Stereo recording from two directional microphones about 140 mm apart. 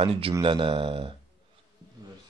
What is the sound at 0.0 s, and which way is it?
A man's voice, 40° right (ahead or behind).